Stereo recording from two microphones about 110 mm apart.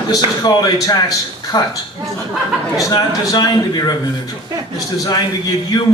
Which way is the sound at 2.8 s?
35° left (ahead or behind).